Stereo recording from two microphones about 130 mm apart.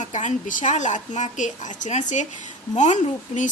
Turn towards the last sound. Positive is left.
turn(degrees=70)  # may be behind; listen again after turning